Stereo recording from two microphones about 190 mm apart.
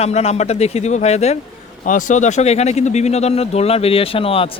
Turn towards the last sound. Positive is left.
turn(degrees=30)  # may be behind; listen again after turning